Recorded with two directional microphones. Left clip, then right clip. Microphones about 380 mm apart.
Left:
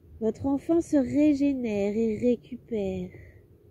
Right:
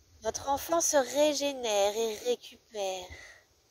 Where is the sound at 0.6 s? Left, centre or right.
Right.